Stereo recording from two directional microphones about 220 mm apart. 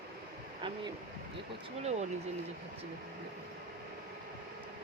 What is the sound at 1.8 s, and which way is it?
Speech, 30° right (ahead or behind).